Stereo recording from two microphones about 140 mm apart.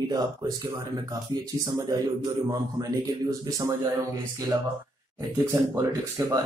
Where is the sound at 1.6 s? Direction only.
25° right (ahead or behind).